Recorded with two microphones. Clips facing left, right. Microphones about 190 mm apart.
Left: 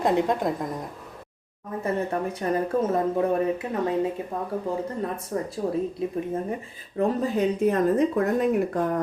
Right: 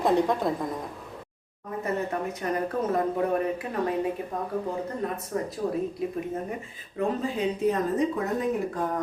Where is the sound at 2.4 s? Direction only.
35° left (ahead or behind).